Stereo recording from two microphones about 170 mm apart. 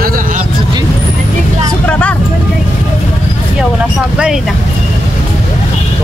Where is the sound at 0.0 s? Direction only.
55° right (ahead or behind).